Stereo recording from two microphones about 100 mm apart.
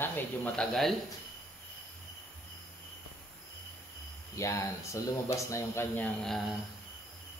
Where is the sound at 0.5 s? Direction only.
Centre (ahead or behind).